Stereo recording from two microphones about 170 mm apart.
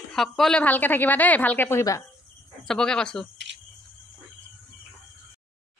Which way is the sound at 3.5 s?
90° right.